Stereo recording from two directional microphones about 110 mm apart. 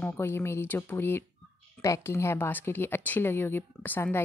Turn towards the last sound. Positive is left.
turn(degrees=20)  # may be behind; listen again after turning